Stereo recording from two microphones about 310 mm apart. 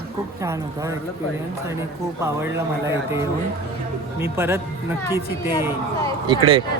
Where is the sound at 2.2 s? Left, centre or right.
Centre.